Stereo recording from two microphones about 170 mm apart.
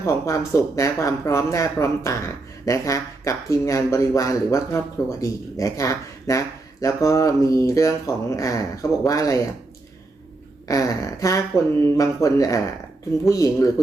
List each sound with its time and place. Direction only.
0.0 s speech: 20° left (ahead or behind)
10.7 s speech: 20° left (ahead or behind)